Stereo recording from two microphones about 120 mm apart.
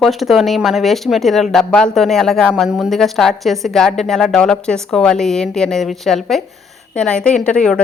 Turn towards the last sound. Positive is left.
turn(degrees=5)  # may be behind; listen again after turning